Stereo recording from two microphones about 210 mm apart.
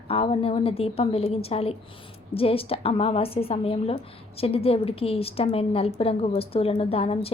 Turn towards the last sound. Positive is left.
turn(degrees=25)  # may be behind; listen again after turning